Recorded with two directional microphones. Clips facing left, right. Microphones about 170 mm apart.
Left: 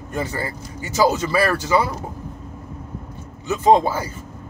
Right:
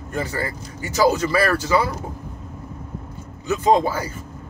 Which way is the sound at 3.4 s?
25° left (ahead or behind).